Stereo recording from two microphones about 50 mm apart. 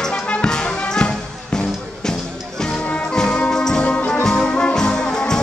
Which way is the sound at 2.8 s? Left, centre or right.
Left.